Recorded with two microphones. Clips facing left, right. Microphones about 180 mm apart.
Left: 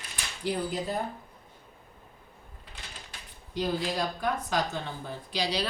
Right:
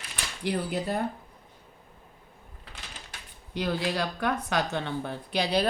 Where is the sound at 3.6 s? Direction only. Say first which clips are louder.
Right 1 dB; 70° right (ahead or behind).